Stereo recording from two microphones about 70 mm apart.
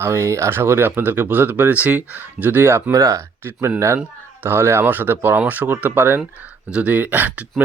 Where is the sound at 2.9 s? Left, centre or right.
Right.